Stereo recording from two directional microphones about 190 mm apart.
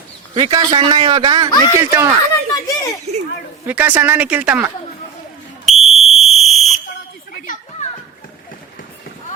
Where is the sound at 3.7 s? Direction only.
10° right (ahead or behind).